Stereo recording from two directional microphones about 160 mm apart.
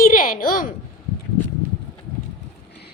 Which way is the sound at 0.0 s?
60° left (ahead or behind).